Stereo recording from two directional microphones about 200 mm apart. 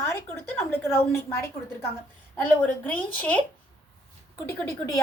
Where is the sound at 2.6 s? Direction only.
10° left (ahead or behind).